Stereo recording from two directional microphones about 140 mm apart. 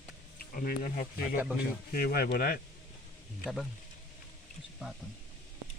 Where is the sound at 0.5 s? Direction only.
85° left.